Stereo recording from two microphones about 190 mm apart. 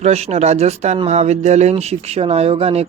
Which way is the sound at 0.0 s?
35° right (ahead or behind).